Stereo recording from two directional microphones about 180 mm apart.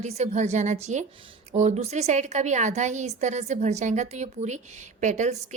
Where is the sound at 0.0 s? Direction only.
35° right (ahead or behind).